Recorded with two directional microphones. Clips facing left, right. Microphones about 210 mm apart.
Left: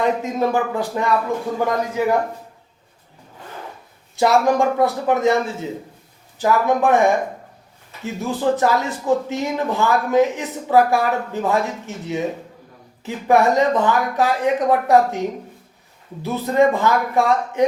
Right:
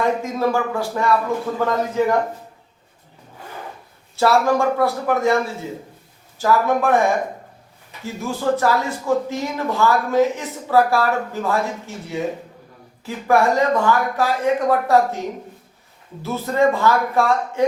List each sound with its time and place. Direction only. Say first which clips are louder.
0.0 s speech: even; 20° left (ahead or behind)
4.2 s speech: left 1 dB; 15° left (ahead or behind)
8.0 s speech: left 2 dB; 20° left (ahead or behind)
16.2 s speech: left 2 dB; 15° left (ahead or behind)